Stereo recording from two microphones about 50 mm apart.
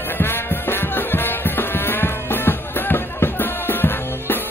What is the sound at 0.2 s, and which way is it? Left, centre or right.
Music, left.